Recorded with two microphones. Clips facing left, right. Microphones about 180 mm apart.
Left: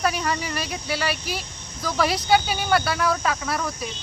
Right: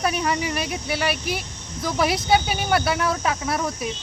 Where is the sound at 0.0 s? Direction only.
20° right (ahead or behind).